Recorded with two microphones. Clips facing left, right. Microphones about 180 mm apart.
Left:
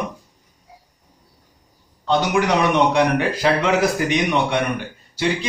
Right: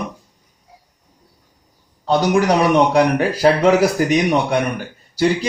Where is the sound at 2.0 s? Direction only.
35° right (ahead or behind).